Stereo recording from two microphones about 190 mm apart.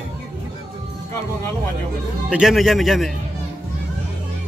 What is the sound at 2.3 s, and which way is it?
Speech, centre (ahead or behind).